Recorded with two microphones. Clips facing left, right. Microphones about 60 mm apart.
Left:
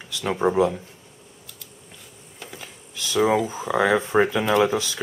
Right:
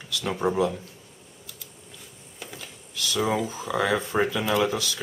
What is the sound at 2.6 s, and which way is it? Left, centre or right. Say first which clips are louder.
Computer keyboard: right 2 dB; left.